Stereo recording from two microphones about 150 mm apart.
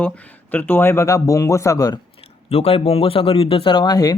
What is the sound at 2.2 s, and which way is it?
Speech, 40° left (ahead or behind).